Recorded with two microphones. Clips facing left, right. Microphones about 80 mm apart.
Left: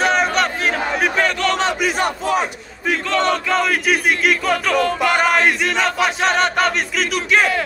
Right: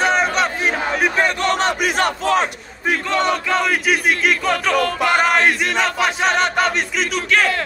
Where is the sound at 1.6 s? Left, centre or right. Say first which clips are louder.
Right 1 dB; right.